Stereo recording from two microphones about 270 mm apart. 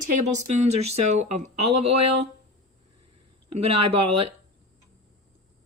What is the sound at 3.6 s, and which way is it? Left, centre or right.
Speech, right.